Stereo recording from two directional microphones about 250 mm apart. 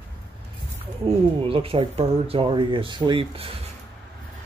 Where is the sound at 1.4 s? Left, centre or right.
Right.